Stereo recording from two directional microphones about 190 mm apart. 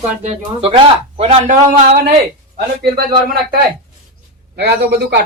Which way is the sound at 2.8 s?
50° right (ahead or behind).